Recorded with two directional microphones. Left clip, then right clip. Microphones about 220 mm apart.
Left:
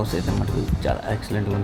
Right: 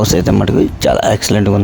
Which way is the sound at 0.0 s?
40° right (ahead or behind).